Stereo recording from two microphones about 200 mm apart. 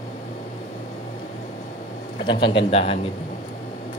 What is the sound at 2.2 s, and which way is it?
Speech, 25° left (ahead or behind).